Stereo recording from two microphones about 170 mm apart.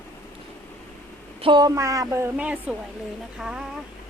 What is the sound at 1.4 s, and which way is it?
A woman's voice, 30° right (ahead or behind).